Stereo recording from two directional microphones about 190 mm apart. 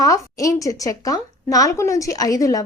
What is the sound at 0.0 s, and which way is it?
Speech, 15° left (ahead or behind).